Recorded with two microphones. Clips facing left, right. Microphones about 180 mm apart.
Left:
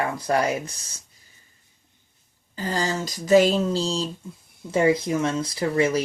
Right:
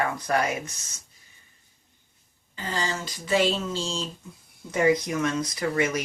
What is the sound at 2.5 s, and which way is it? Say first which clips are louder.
Speech: left 4 dB; 40° left (ahead or behind).